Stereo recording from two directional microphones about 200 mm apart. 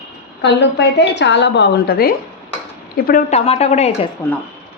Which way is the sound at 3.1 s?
40° left (ahead or behind).